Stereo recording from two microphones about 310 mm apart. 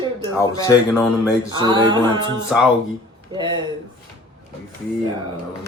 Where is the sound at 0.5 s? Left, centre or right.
Centre.